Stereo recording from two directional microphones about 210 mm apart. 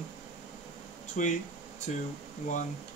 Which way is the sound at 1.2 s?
35° left (ahead or behind).